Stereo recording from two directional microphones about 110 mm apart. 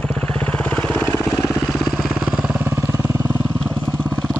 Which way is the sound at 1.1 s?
35° left (ahead or behind).